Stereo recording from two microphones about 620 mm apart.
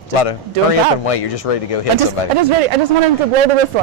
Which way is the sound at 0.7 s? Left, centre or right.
Left.